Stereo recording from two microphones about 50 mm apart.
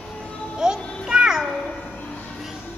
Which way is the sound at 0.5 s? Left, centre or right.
Centre.